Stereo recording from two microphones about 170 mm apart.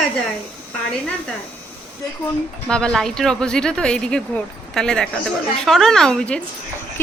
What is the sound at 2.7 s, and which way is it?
A woman's voice, 5° left (ahead or behind).